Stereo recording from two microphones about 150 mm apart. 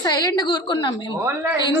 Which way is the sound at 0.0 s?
25° left (ahead or behind).